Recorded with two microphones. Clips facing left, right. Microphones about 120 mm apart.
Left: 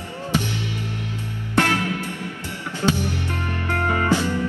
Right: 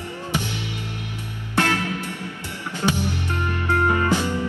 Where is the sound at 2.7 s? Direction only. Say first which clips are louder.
Left 1 dB; 15° right (ahead or behind).